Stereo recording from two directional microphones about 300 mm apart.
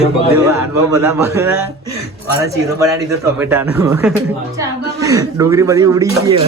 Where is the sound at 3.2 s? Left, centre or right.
Centre.